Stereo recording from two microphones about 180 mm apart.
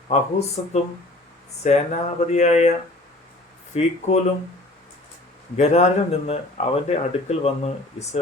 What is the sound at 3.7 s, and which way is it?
Speech, 35° left (ahead or behind).